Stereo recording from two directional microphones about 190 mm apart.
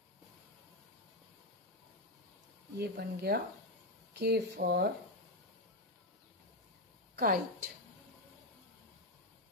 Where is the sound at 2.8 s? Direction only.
60° right (ahead or behind).